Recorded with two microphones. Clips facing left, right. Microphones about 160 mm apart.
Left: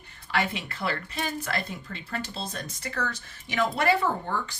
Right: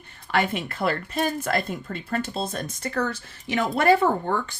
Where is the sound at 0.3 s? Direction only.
50° right (ahead or behind).